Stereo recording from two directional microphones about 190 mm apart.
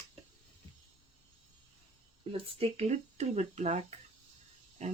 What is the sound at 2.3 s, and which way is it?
Speech, 30° right (ahead or behind).